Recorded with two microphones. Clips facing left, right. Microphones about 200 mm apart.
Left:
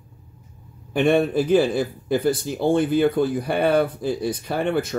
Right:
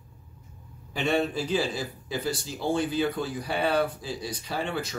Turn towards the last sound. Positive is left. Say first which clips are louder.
# left 8 dB
turn(degrees=55)  # may be behind; listen again after turning